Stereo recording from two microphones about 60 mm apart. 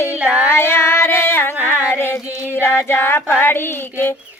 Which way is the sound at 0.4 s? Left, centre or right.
Left.